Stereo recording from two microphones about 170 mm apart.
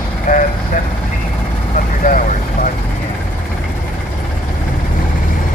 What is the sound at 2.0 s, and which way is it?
Vehicle, 50° left (ahead or behind).